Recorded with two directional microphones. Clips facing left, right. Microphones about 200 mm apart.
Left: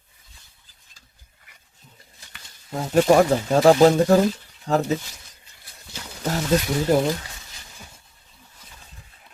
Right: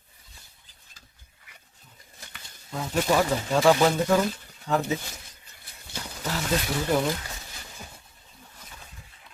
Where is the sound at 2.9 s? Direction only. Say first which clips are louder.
Left 8 dB; 45° left (ahead or behind).